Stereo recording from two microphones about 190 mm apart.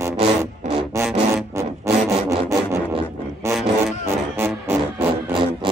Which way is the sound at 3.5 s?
Centre (ahead or behind).